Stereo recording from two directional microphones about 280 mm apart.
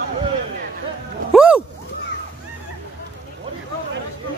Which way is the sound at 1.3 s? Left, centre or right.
Centre.